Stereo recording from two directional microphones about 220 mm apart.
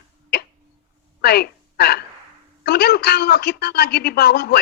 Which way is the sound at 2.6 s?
45° left (ahead or behind).